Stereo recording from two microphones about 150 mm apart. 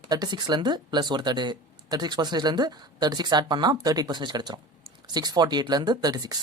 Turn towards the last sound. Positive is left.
turn(degrees=-25)  # may be behind; listen again after turning